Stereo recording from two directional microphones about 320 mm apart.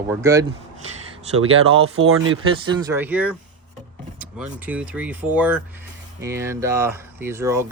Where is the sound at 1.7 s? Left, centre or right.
Centre.